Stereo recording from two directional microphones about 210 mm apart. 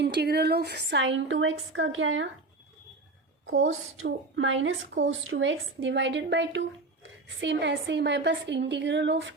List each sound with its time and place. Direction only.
0.0 s a woman's voice: 50° right (ahead or behind); by 2.2 s 70° right (ahead or behind)
3.4 s a woman's voice: 70° right (ahead or behind)